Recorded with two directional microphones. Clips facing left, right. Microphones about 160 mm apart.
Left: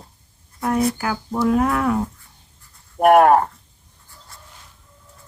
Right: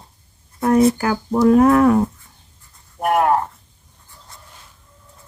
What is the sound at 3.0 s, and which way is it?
Speech, 65° left (ahead or behind).